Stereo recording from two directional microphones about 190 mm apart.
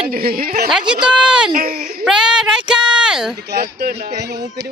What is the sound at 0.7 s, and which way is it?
Speech, 5° right (ahead or behind).